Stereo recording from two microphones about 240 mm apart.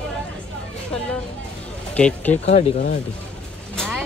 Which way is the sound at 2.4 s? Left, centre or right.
Left.